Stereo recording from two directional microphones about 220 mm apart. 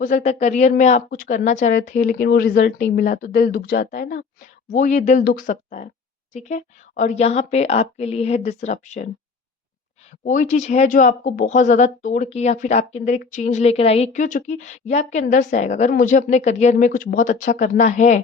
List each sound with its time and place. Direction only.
0.0 s a woman's voice: 35° left (ahead or behind)
10.2 s speech: 35° left (ahead or behind)